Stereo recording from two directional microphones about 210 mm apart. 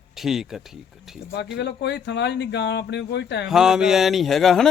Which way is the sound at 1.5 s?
55° left (ahead or behind).